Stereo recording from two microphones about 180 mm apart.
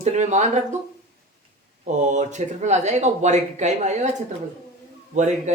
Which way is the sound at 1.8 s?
40° right (ahead or behind).